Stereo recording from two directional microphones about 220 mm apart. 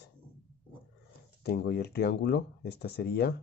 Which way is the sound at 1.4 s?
45° left (ahead or behind).